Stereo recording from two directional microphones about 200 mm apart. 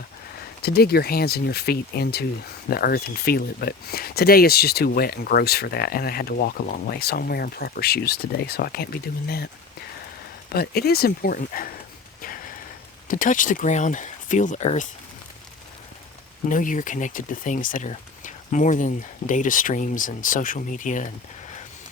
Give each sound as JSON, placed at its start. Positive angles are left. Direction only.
{"t": 0.6, "sound": "speech", "side_deg": 50}
{"t": 10.5, "sound": "speech", "side_deg": 50}
{"t": 13.1, "sound": "speech", "side_deg": 40}
{"t": 16.5, "sound": "speech", "side_deg": 40}